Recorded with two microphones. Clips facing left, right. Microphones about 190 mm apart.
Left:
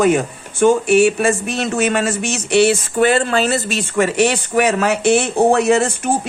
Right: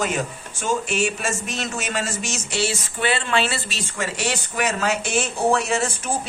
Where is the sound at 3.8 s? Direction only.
60° left (ahead or behind).